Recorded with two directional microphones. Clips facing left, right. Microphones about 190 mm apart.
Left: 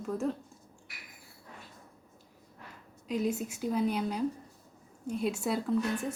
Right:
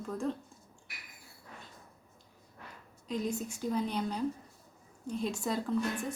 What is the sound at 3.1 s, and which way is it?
Speech, 5° left (ahead or behind).